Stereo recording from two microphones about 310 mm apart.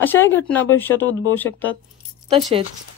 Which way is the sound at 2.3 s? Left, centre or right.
Centre.